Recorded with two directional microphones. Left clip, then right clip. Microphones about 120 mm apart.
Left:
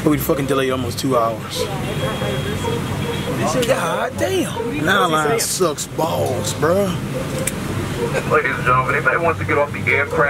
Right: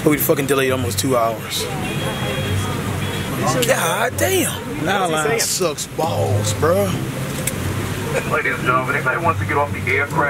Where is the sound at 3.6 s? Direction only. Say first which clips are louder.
Right 2 dB; 10° right (ahead or behind).